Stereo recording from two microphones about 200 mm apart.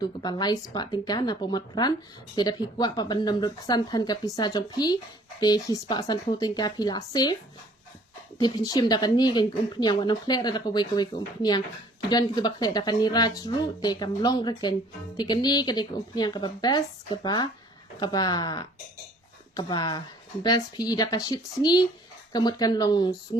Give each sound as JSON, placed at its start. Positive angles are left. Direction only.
{"t": 0.0, "sound": "speech", "side_deg": 20}
{"t": 8.4, "sound": "speech", "side_deg": 20}